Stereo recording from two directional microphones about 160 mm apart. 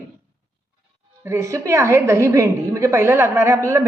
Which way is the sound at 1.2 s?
15° right (ahead or behind).